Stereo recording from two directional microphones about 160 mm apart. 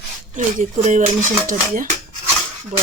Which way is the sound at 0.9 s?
50° right (ahead or behind).